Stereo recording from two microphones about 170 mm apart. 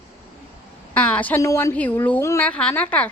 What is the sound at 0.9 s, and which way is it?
A woman's voice, 10° left (ahead or behind).